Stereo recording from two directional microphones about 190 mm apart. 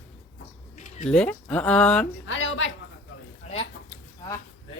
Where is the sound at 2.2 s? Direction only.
90° left.